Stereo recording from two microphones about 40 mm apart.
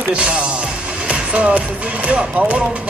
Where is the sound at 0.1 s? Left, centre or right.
Right.